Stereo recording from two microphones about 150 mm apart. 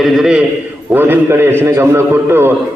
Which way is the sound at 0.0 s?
5° right (ahead or behind).